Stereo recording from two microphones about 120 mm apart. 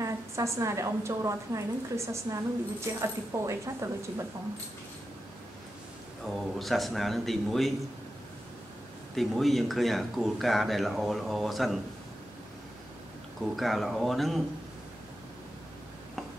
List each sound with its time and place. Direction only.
0.0 s a woman's voice: 25° right (ahead or behind)
6.2 s speech: centre (ahead or behind)
9.1 s speech: centre (ahead or behind)
13.4 s speech: centre (ahead or behind)